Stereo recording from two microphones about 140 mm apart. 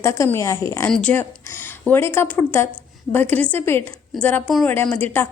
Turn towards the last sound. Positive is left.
turn(degrees=15)  # may be behind; listen again after turning